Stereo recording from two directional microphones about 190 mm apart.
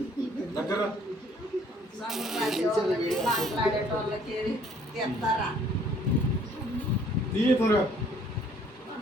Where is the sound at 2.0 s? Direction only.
Centre (ahead or behind).